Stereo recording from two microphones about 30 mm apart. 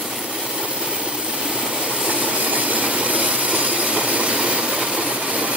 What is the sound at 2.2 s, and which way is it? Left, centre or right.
Train, right.